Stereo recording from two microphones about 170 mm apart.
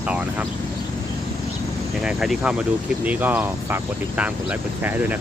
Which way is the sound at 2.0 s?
5° right (ahead or behind).